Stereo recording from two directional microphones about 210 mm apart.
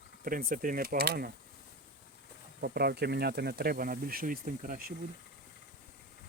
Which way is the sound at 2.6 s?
50° right (ahead or behind).